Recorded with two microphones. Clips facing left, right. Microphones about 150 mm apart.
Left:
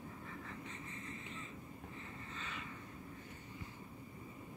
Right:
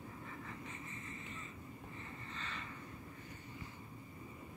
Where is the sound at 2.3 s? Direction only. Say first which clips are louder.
Even; 5° left (ahead or behind).